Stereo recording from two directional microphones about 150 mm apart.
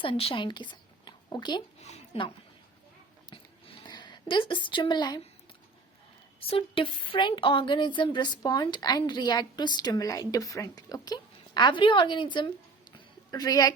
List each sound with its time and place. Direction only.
0.0 s a woman's voice: 40° left (ahead or behind)
1.8 s a sound: 40° left (ahead or behind)
6.4 s speech: 35° left (ahead or behind)